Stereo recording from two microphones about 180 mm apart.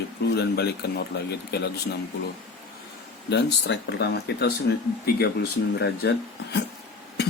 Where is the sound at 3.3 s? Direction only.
70° left (ahead or behind).